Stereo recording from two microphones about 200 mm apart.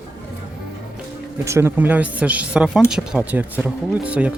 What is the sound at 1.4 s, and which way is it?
Speech, 15° right (ahead or behind).